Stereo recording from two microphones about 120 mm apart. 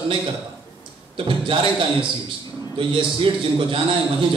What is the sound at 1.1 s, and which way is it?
A man's voice, 45° right (ahead or behind).